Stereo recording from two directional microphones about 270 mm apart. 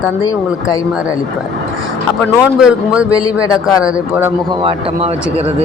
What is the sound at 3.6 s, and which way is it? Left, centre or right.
Speech, centre.